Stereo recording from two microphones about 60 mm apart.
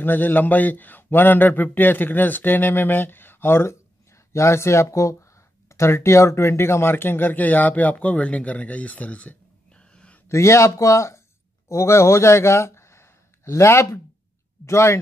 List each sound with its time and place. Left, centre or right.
0.0 s a man's voice: left
4.3 s speech: left
10.2 s a man's voice: left